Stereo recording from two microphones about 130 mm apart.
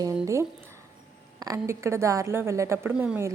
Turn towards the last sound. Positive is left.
turn(degrees=-5)  # may be behind; listen again after turning